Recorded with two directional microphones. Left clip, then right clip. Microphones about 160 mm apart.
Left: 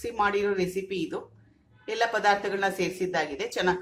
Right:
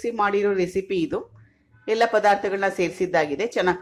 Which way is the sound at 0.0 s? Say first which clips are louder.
Right 4 dB; 35° right (ahead or behind).